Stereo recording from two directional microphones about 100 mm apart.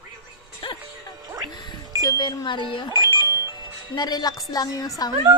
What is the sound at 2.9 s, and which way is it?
Alarm, 45° right (ahead or behind).